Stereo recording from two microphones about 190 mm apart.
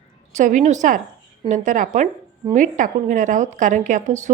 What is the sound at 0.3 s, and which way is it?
Speech, 40° right (ahead or behind).